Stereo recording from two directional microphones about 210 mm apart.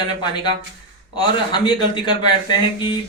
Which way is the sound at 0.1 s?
20° left (ahead or behind).